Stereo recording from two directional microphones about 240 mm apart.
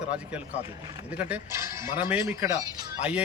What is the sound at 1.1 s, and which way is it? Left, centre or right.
A man's voice, centre.